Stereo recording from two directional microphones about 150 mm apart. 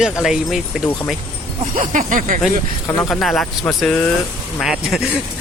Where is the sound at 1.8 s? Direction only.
60° right (ahead or behind).